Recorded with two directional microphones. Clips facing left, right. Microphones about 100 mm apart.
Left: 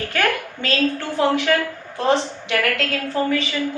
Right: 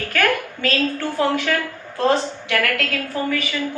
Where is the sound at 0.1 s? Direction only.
20° left (ahead or behind).